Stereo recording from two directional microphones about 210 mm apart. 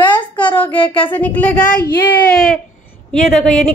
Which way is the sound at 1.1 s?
10° left (ahead or behind).